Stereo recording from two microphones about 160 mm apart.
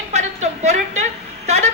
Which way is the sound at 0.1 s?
45° right (ahead or behind).